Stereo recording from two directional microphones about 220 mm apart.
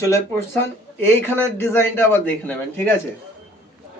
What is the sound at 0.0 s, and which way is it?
A man's voice, 10° left (ahead or behind).